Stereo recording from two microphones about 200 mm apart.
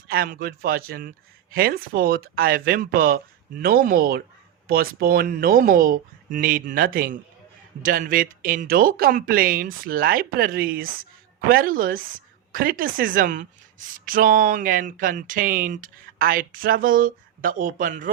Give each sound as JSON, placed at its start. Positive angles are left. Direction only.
{"t": 0.1, "sound": "a woman's voice", "side_deg": -50}